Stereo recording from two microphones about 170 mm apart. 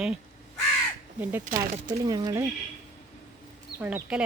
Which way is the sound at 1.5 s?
50° right (ahead or behind).